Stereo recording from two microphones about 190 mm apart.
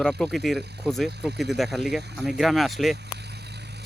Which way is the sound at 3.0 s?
60° right (ahead or behind).